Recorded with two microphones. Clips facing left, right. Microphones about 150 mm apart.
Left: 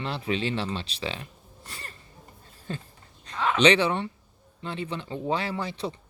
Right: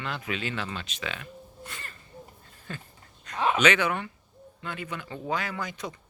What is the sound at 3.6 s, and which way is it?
Speech, 30° left (ahead or behind).